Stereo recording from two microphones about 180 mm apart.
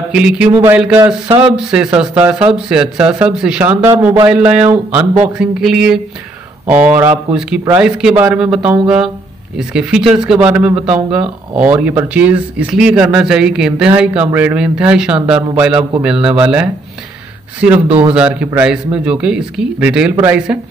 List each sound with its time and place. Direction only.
0.1 s speech: 5° right (ahead or behind)
7.0 s speech: 10° right (ahead or behind)
17.8 s speech: 30° right (ahead or behind)
18.1 s speech: 5° right (ahead or behind)